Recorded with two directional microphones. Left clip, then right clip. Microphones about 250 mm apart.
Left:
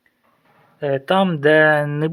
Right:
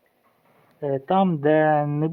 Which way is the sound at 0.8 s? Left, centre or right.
Centre.